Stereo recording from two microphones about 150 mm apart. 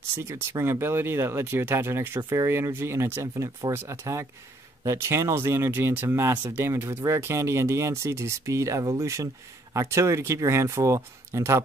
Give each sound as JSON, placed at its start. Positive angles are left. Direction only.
{"t": 0.2, "sound": "speech", "side_deg": -15}